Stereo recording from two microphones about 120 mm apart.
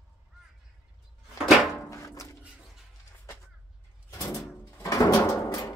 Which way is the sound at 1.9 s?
25° left (ahead or behind).